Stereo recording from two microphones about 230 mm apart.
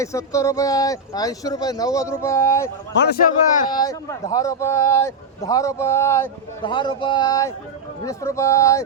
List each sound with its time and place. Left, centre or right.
0.0 s speech: centre
3.0 s a man's voice: left
3.7 s speech: centre